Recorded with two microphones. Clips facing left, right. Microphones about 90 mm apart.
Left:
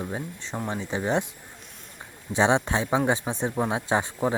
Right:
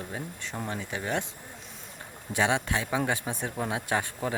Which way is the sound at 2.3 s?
25° left (ahead or behind).